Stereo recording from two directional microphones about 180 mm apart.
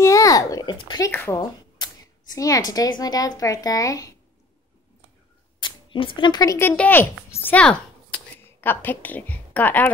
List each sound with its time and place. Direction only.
0.0 s a sound: 15° left (ahead or behind)
1.1 s a woman's voice: 10° left (ahead or behind)
5.6 s speech: 25° left (ahead or behind); by 9.8 s 10° left (ahead or behind)